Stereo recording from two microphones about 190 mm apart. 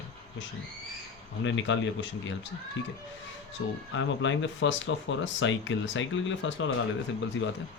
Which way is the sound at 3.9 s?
80° left.